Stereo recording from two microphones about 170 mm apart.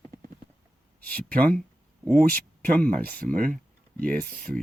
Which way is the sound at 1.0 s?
10° left (ahead or behind).